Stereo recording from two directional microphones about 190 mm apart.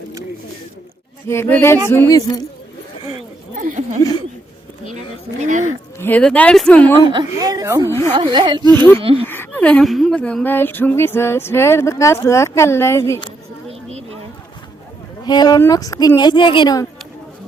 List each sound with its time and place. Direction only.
1.3 s speech: 10° left (ahead or behind)
5.4 s speech: 40° right (ahead or behind)
6.0 s speech: 10° left (ahead or behind)
7.0 s speech: 25° right (ahead or behind)
7.9 s speech: 15° left (ahead or behind)
8.1 s speech: 25° right (ahead or behind)
9.2 s speech: 10° left (ahead or behind)
15.2 s speech: 20° left (ahead or behind)